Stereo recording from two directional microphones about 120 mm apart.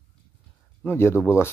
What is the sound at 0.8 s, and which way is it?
Speech, 20° left (ahead or behind).